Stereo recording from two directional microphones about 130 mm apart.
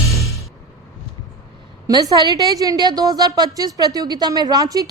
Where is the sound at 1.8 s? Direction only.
30° right (ahead or behind).